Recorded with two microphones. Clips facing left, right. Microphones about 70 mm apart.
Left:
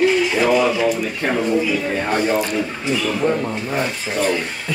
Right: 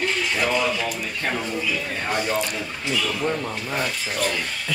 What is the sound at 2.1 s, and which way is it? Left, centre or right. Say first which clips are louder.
Speech: left 5 dB; left.